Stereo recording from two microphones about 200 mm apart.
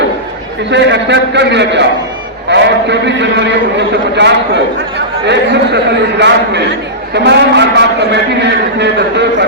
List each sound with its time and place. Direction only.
0.7 s a man's voice: 60° right (ahead or behind)